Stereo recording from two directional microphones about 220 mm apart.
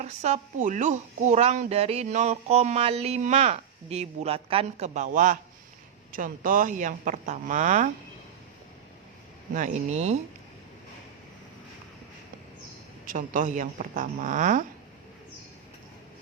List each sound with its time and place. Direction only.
0.0 s speech: 30° right (ahead or behind)
9.5 s speech: 35° right (ahead or behind)
13.1 s speech: 35° right (ahead or behind)